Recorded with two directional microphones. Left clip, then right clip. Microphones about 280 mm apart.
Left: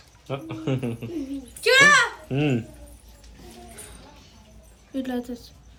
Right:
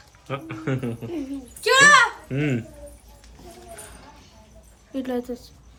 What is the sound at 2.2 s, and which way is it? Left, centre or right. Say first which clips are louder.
Speech: left 1 dB; centre.